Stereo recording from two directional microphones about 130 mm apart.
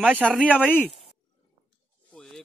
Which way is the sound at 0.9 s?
50° left (ahead or behind).